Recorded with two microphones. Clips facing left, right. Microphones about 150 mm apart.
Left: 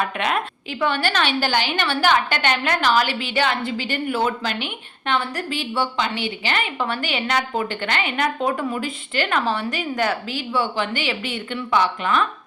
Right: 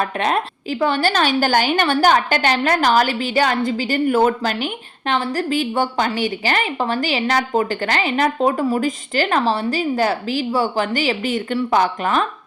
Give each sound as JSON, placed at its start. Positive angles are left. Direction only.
{"t": 0.0, "sound": "a woman's voice", "side_deg": -35}